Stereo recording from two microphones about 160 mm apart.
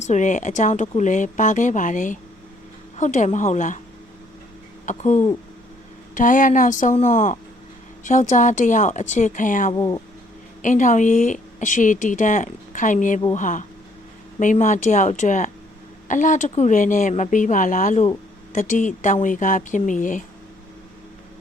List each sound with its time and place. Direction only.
0.0 s a woman's voice: 50° left (ahead or behind)
4.9 s a woman's voice: 50° left (ahead or behind)
9.7 s speech: 20° left (ahead or behind)
10.6 s a woman's voice: 55° left (ahead or behind)